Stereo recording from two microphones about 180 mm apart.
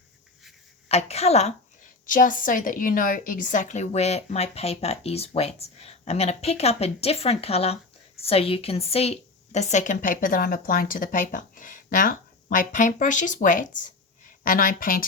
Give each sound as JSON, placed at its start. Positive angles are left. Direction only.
{"t": 0.9, "sound": "a woman's voice", "side_deg": 35}
{"t": 2.0, "sound": "a woman's voice", "side_deg": 50}